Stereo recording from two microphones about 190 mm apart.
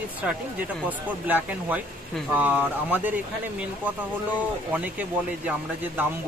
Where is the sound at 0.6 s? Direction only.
10° right (ahead or behind).